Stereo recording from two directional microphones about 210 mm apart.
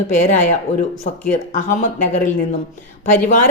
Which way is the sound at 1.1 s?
35° left (ahead or behind).